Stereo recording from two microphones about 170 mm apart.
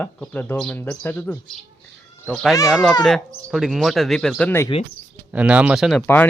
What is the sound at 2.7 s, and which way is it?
Speech, centre (ahead or behind).